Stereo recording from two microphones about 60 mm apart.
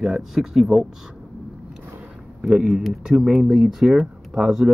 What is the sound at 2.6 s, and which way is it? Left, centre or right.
Speech, centre.